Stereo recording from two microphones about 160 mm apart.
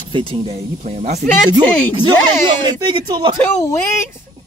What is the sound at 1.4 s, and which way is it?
Speech, 25° right (ahead or behind).